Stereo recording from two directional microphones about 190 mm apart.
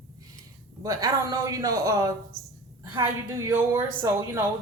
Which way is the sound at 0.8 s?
20° right (ahead or behind).